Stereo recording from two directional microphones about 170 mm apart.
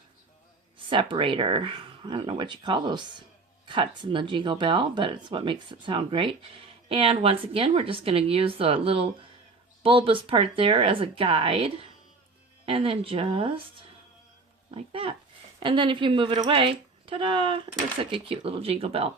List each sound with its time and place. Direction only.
0.9 s speech: 30° right (ahead or behind)
14.7 s speech: 30° right (ahead or behind)